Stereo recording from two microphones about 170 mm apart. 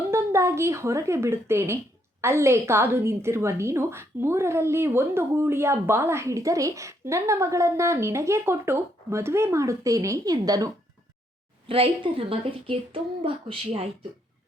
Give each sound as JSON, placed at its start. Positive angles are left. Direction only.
{"t": 0.1, "sound": "a woman's voice", "side_deg": -15}
{"t": 11.7, "sound": "a woman's voice", "side_deg": -35}